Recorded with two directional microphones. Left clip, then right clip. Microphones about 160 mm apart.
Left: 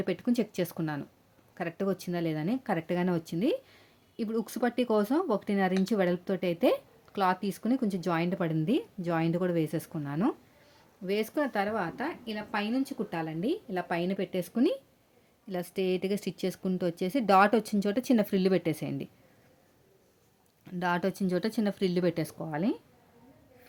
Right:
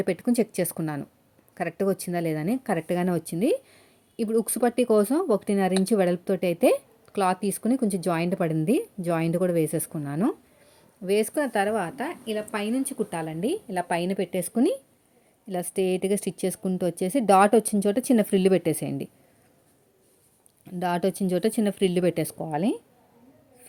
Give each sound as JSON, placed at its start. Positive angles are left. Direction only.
{"t": 0.0, "sound": "a woman's voice", "side_deg": -25}
{"t": 20.7, "sound": "a woman's voice", "side_deg": -15}